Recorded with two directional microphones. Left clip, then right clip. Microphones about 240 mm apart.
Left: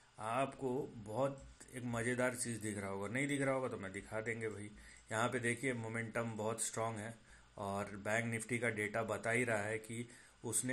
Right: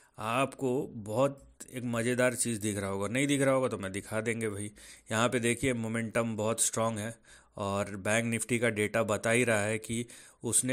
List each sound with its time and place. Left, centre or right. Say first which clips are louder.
0.2 s speech: right 8 dB; right
0.7 s speech: right 9 dB; right
1.2 s speech: right 9 dB; right
7.8 s speech: right 7 dB; right